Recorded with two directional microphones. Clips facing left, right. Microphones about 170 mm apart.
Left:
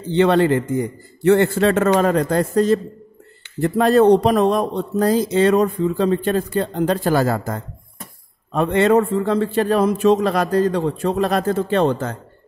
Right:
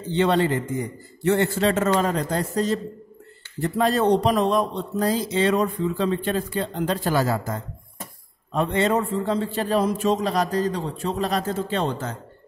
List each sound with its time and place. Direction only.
0.1 s a man's voice: 60° left (ahead or behind)